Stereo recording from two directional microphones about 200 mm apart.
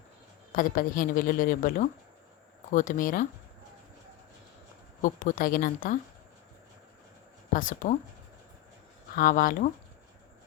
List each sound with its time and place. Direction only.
0.5 s speech: 45° left (ahead or behind)
5.0 s speech: 45° left (ahead or behind)
7.5 s speech: 40° left (ahead or behind)
9.1 s speech: 45° left (ahead or behind)